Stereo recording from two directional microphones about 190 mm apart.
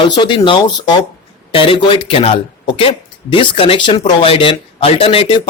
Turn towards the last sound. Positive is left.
turn(degrees=30)  # may be behind; listen again after turning